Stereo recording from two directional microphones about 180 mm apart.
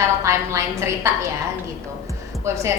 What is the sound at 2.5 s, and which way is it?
Speech, 15° right (ahead or behind).